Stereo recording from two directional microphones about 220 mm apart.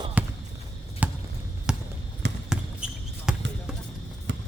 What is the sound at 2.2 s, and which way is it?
Basketball bounce, 50° right (ahead or behind).